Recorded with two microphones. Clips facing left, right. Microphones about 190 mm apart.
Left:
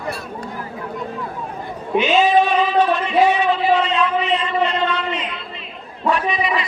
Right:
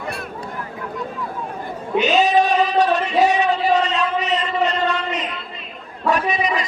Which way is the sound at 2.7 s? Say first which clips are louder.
Left 1 dB; 40° right (ahead or behind).